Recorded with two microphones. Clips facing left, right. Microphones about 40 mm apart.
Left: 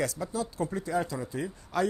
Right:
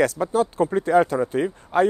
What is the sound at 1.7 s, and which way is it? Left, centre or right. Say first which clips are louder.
Speech: right 9 dB; right.